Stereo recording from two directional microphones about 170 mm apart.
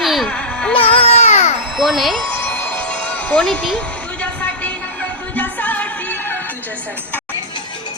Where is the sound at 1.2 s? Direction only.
40° left (ahead or behind).